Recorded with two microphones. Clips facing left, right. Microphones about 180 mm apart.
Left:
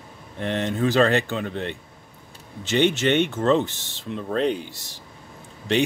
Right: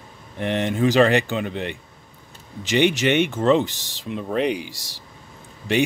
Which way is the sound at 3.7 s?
90° right.